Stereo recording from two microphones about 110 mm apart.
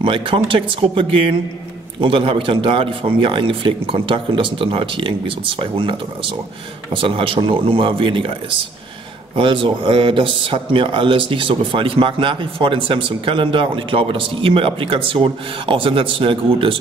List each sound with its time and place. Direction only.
0.0 s speech: 55° right (ahead or behind)